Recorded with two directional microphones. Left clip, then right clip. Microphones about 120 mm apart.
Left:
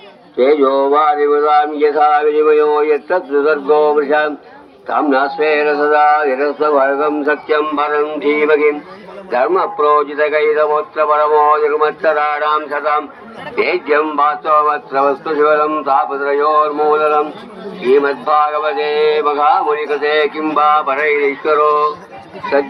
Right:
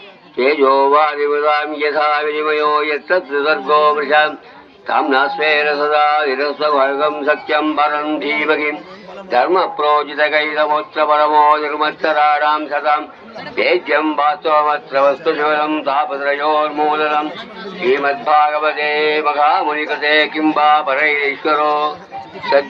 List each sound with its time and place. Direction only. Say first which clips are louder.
0.3 s speech: left 1 dB; 50° right (ahead or behind)
12.4 s speech: even; 25° right (ahead or behind)
12.6 s a man's voice: even; 10° right (ahead or behind)
13.6 s speech: left 1 dB; 45° right (ahead or behind)
17.7 s speech: left 3 dB; 30° right (ahead or behind)
19.7 s speech: even; 45° right (ahead or behind)